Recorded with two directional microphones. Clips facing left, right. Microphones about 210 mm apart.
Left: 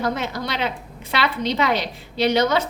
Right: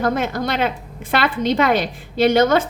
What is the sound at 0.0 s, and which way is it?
A woman's voice, 50° right (ahead or behind).